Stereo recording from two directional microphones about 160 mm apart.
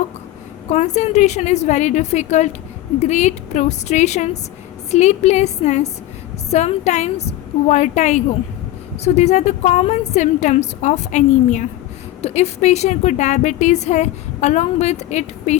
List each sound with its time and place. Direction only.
0.7 s a woman's voice: 45° left (ahead or behind)